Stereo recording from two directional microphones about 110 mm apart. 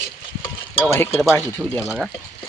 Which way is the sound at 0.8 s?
20° left (ahead or behind).